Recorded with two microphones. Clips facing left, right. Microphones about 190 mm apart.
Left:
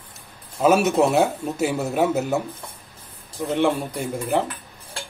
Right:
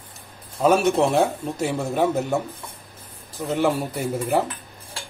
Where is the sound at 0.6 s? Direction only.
5° left (ahead or behind).